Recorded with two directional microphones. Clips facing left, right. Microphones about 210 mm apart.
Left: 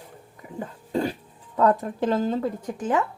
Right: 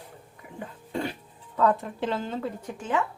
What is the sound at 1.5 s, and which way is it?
Speech, 40° left (ahead or behind).